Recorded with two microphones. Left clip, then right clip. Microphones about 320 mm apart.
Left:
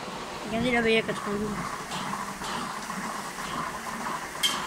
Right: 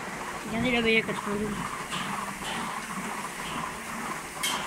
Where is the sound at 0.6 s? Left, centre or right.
Centre.